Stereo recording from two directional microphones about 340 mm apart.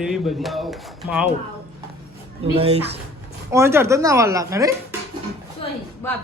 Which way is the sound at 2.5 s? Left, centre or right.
Centre.